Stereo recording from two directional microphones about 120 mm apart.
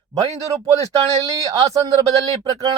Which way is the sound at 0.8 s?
30° right (ahead or behind).